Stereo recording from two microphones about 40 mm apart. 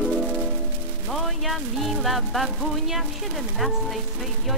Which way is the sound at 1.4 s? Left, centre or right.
Centre.